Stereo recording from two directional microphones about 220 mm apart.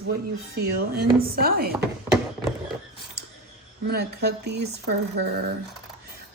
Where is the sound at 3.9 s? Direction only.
50° right (ahead or behind).